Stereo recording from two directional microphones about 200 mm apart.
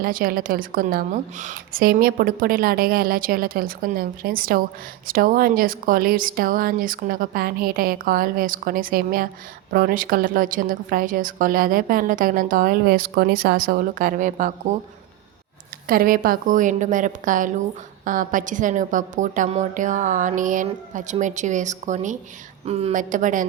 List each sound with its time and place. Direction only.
0.0 s a woman's voice: 45° right (ahead or behind)
15.9 s a woman's voice: 45° right (ahead or behind)